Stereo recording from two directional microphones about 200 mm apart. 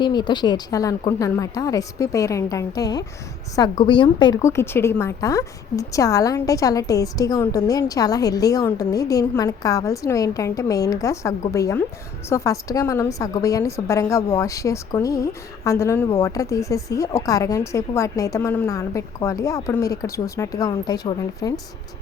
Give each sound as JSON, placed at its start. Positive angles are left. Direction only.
{"t": 0.0, "sound": "a woman's voice", "side_deg": 20}